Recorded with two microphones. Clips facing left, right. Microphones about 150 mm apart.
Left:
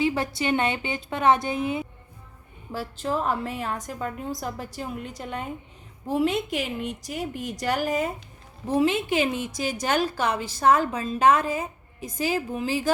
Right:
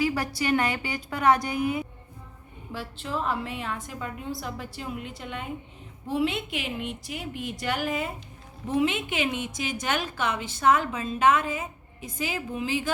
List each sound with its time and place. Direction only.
0.0 s a woman's voice: 25° left (ahead or behind)
2.7 s a woman's voice: 40° left (ahead or behind)